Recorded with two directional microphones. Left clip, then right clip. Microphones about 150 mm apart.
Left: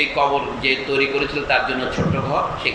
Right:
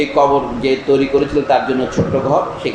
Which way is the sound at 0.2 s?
55° right (ahead or behind).